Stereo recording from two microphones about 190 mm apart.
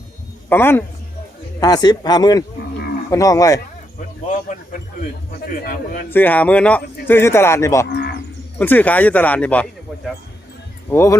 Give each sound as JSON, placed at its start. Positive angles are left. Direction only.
{"t": 0.5, "sound": "speech", "side_deg": 10}
{"t": 4.9, "sound": "a man's voice", "side_deg": 45}
{"t": 6.1, "sound": "speech", "side_deg": 10}